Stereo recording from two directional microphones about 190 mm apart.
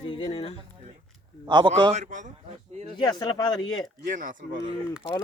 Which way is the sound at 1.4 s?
25° right (ahead or behind).